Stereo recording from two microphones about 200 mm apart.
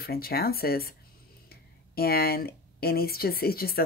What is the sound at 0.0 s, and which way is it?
Speech, 50° left (ahead or behind).